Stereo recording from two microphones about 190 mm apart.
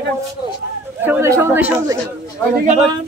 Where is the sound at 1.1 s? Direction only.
15° right (ahead or behind).